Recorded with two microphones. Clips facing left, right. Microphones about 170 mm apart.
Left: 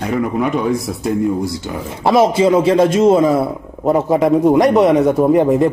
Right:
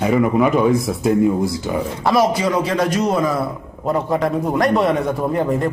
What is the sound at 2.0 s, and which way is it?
A man's voice, 25° left (ahead or behind).